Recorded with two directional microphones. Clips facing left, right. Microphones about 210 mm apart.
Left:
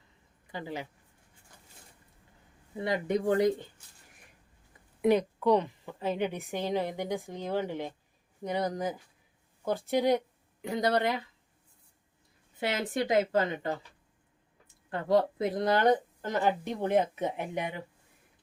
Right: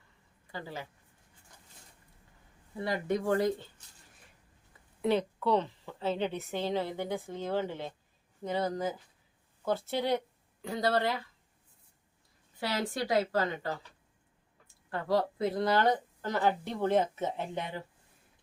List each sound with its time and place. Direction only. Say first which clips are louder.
0.5 s speech: left 4 dB; 15° left (ahead or behind)
2.8 s a woman's voice: left 2 dB; 20° left (ahead or behind)
5.0 s speech: left 4 dB; 15° left (ahead or behind)
12.5 s a woman's voice: left 2 dB; 20° left (ahead or behind)
14.8 s speech: left 4 dB; 20° left (ahead or behind)